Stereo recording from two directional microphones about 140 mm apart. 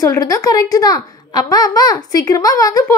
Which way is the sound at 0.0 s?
25° left (ahead or behind).